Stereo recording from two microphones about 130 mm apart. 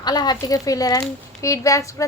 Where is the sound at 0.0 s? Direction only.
30° left (ahead or behind).